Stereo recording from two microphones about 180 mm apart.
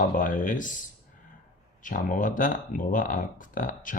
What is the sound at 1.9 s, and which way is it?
Speech, 45° left (ahead or behind).